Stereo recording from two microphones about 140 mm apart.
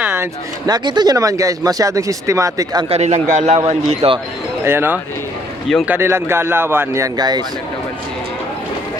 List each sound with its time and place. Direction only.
0.0 s a sound: 15° right (ahead or behind)
0.7 s speech: 30° right (ahead or behind)
2.9 s a man's voice: 55° right (ahead or behind)
4.6 s speech: 15° right (ahead or behind)